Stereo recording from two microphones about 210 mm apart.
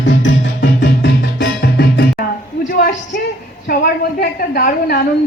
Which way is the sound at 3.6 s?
45° left (ahead or behind).